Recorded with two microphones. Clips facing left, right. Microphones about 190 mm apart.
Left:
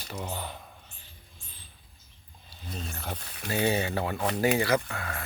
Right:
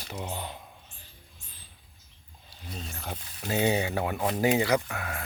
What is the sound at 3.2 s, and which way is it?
Speech, 70° left (ahead or behind).